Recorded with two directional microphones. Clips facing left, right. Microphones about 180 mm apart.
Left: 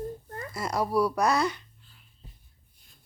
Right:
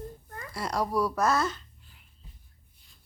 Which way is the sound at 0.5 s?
5° left (ahead or behind).